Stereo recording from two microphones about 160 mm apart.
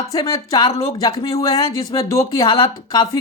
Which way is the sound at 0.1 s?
20° left (ahead or behind).